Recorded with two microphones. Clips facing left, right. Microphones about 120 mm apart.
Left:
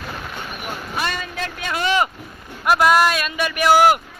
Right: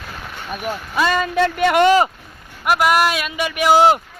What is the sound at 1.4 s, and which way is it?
Speech, 75° right (ahead or behind).